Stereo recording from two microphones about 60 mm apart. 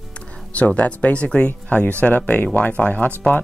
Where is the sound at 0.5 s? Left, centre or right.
Left.